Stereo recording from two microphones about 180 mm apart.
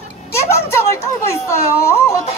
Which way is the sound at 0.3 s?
15° left (ahead or behind).